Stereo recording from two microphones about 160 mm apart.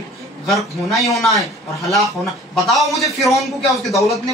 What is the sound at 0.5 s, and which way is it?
Speech, centre (ahead or behind).